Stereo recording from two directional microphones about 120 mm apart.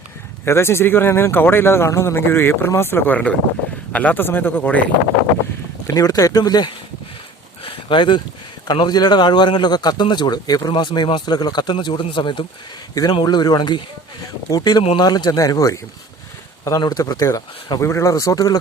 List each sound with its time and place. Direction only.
0.4 s speech: 20° left (ahead or behind)
5.9 s a man's voice: 30° left (ahead or behind)
7.6 s a sound: 45° left (ahead or behind)
8.6 s a man's voice: 35° left (ahead or behind)
12.9 s a man's voice: 30° left (ahead or behind)